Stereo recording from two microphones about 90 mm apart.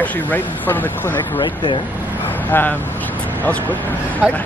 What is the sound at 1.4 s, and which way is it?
Speech, 65° left (ahead or behind).